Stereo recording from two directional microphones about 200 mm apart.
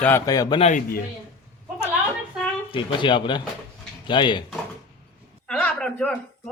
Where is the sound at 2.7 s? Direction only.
25° left (ahead or behind).